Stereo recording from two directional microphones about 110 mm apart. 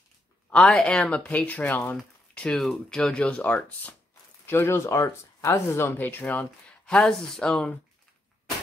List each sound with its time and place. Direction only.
0.5 s speech: 10° left (ahead or behind)
6.9 s speech: 5° left (ahead or behind)